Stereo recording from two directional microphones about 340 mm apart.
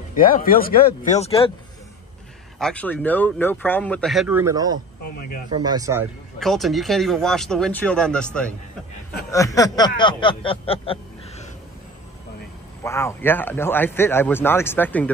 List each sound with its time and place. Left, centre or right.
0.1 s speech: left
2.6 s speech: centre
5.0 s speech: left
5.5 s speech: centre
12.8 s speech: centre